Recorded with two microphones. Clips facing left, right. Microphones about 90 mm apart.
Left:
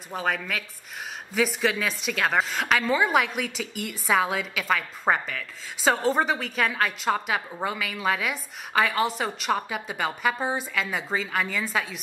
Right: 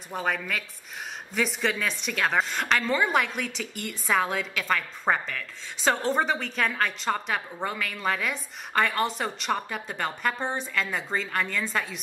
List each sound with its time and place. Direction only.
0.1 s a woman's voice: centre (ahead or behind)